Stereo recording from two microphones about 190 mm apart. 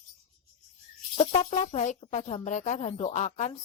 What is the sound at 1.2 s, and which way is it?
Speech, 35° left (ahead or behind).